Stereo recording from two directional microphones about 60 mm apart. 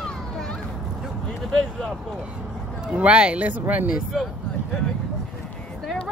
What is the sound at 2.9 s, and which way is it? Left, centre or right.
Speech, centre.